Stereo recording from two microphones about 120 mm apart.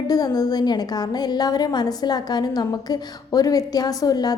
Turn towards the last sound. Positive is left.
turn(degrees=30)  # may be behind; listen again after turning